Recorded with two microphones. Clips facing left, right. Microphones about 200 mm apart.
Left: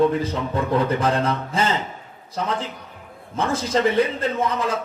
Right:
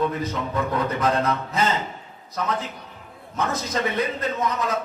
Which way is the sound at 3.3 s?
30° left (ahead or behind).